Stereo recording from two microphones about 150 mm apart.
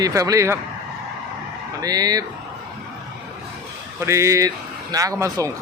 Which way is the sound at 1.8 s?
25° right (ahead or behind).